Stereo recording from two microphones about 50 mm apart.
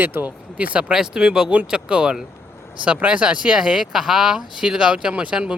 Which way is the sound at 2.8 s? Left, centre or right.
Right.